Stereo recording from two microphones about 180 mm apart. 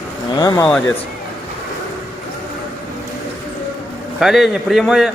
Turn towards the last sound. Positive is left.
turn(degrees=0)  # may be behind; listen again after turning